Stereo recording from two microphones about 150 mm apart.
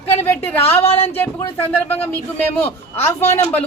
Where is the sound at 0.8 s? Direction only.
40° left (ahead or behind).